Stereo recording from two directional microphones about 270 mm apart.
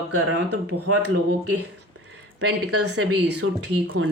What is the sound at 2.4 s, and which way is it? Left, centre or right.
Speech, right.